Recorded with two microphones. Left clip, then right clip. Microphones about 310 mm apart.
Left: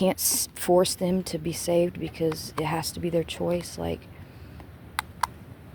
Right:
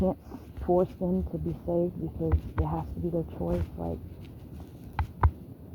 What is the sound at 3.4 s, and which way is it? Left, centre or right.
Speech, left.